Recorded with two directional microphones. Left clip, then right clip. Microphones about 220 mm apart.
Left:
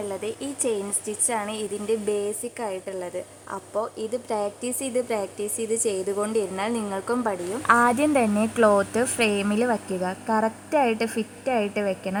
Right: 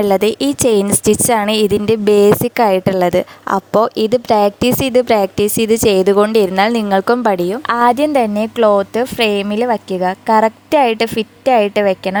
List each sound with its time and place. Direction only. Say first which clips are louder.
0.0 s a woman's voice: right 17 dB; 45° right (ahead or behind)
7.7 s a woman's voice: right 6 dB; 50° right (ahead or behind)
10.7 s a woman's voice: right 10 dB; 55° right (ahead or behind)